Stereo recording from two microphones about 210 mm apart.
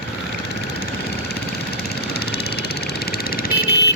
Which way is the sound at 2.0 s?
50° left (ahead or behind).